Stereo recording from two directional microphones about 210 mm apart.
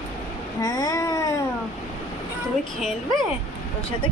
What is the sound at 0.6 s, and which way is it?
Speech, 15° left (ahead or behind).